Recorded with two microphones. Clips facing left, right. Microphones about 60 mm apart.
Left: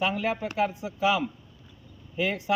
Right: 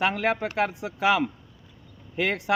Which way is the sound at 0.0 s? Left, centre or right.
Right.